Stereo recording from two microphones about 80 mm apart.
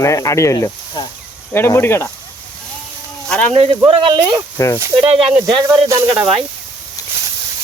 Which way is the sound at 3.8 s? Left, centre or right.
Right.